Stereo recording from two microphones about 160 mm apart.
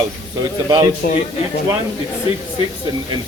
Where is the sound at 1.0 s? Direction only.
65° left (ahead or behind).